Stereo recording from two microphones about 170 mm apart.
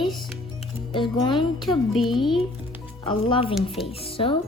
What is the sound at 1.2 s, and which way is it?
Speech, 30° left (ahead or behind).